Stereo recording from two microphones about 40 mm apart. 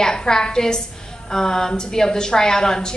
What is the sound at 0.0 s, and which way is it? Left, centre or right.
A woman's voice, centre.